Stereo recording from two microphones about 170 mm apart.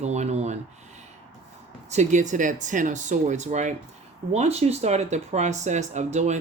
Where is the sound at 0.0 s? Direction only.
40° right (ahead or behind).